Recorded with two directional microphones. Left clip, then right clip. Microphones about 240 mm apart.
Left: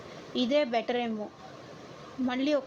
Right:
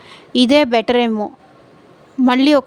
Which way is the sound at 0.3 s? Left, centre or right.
Right.